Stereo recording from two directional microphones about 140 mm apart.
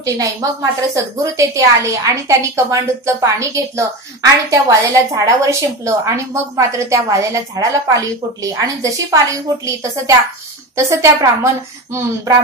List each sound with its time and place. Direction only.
0.0 s a woman's voice: 25° right (ahead or behind)